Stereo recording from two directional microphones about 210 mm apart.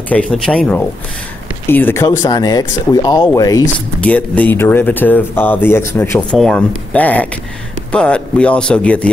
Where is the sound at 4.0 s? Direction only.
5° left (ahead or behind).